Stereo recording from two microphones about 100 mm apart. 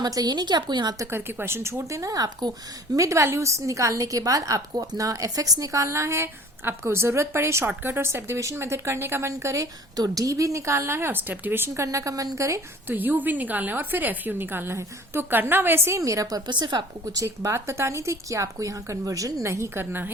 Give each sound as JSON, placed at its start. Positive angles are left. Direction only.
{"t": 0.0, "sound": "a woman's voice", "side_deg": -40}
{"t": 1.1, "sound": "speech", "side_deg": -25}
{"t": 12.9, "sound": "speech", "side_deg": -20}
{"t": 17.2, "sound": "speech", "side_deg": -25}